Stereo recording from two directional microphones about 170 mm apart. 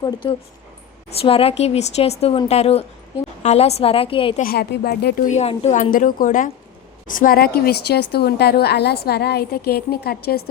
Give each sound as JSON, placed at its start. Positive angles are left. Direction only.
{"t": 0.0, "sound": "a woman's voice", "side_deg": 25}
{"t": 4.4, "sound": "a woman's voice", "side_deg": 65}
{"t": 5.3, "sound": "a woman's voice", "side_deg": 40}